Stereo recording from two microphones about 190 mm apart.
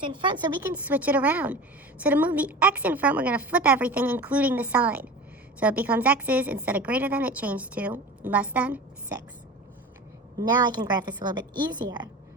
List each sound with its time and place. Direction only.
0.0 s a woman's voice: 25° right (ahead or behind)
0.6 s a woman's voice: 10° right (ahead or behind)
10.3 s a woman's voice: 20° right (ahead or behind)